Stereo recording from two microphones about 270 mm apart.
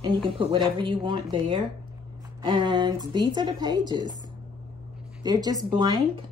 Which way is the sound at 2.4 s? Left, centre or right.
Centre.